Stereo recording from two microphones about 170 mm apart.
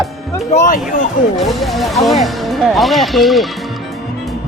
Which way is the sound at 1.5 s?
Centre (ahead or behind).